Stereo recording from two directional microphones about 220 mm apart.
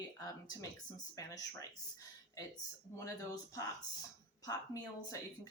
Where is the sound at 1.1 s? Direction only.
15° left (ahead or behind).